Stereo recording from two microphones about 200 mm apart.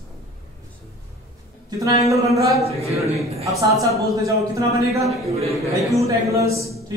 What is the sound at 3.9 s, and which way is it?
A man's voice, 15° right (ahead or behind).